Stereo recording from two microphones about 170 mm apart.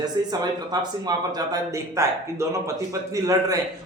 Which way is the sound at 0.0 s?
25° right (ahead or behind).